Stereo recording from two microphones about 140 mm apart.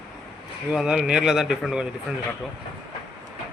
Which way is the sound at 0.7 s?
5° right (ahead or behind).